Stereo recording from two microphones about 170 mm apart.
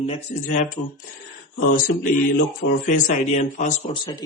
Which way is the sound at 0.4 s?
50° left (ahead or behind).